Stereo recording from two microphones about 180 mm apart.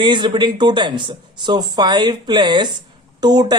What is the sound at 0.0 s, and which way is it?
Speech, 25° right (ahead or behind).